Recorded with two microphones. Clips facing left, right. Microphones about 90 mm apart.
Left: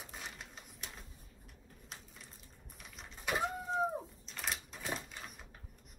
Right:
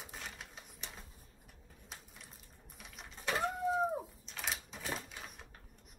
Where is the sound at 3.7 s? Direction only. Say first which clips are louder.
Right 1 dB; centre (ahead or behind).